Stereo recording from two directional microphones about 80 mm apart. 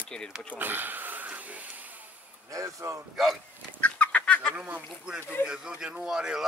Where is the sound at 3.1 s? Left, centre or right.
Centre.